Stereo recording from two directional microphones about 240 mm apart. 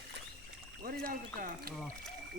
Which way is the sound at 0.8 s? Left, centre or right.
Right.